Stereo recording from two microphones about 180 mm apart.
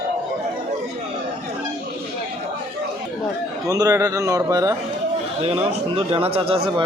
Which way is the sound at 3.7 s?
20° right (ahead or behind).